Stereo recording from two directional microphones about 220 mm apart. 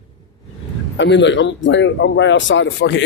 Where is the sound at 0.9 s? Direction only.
55° left (ahead or behind).